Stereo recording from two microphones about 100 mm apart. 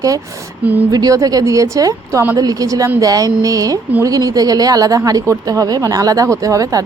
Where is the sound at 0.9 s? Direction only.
40° right (ahead or behind).